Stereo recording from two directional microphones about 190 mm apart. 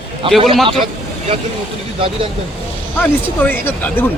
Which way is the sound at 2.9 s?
10° left (ahead or behind).